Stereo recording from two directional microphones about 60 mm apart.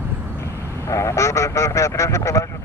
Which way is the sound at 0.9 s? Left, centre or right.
Left.